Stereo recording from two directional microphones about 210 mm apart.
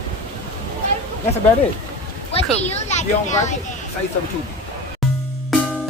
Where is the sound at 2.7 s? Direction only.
35° left (ahead or behind).